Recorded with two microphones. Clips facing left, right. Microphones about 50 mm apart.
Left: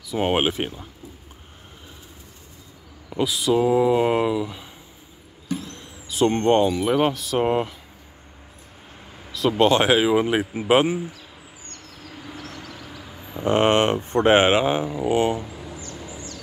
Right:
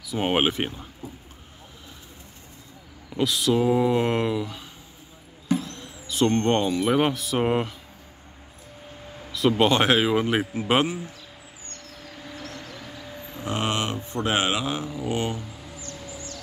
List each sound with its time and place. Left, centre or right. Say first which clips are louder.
0.0 s speech: left 2 dB; centre
3.2 s speech: left 2 dB; centre
5.7 s vehicle: right 1 dB; centre
6.4 s speech: left 4 dB; centre
9.3 s speech: left 2 dB; centre
12.4 s vehicle: left 1 dB; centre
13.4 s speech: left 9 dB; left